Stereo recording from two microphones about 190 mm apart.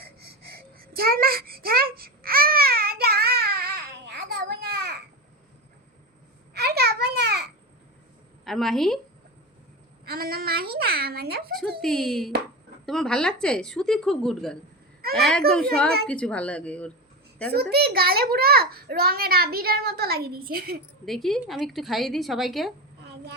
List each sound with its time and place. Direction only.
0.5 s a sound: 50° right (ahead or behind)
6.5 s a sound: 55° right (ahead or behind)
8.4 s a woman's voice: centre (ahead or behind)
10.1 s a child's voice: 55° right (ahead or behind)
11.8 s a woman's voice: centre (ahead or behind)
17.5 s a child's voice: 55° right (ahead or behind)
21.0 s a woman's voice: centre (ahead or behind)